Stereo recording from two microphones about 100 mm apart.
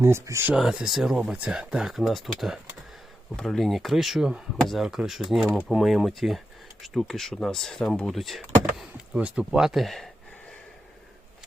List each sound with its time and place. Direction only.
0.0 s speech: 25° right (ahead or behind)
0.5 s speech: 5° right (ahead or behind)